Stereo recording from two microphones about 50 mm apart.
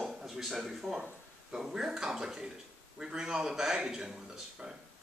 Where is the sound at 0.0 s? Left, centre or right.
Centre.